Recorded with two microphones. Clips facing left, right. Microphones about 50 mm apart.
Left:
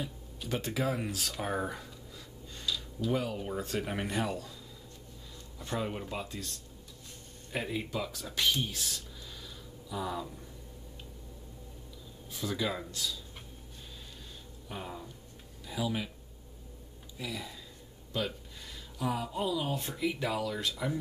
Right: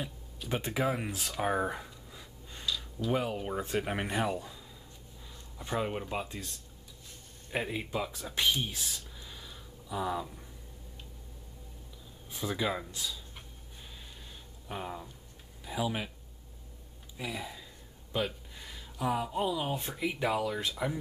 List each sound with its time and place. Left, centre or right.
0.5 s speech: right
2.6 s a sound: centre
3.1 s speech: centre
5.6 s speech: centre
12.3 s speech: centre
14.7 s speech: centre
17.2 s speech: right